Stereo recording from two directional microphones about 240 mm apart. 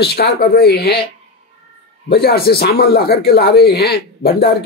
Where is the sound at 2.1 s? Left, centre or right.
Left.